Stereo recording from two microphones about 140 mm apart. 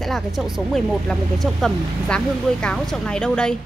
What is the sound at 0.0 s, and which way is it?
A woman's voice, centre (ahead or behind).